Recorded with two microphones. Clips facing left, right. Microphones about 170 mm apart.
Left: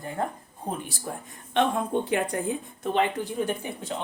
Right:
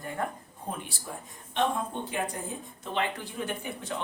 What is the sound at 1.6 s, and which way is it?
Speech, 70° left (ahead or behind).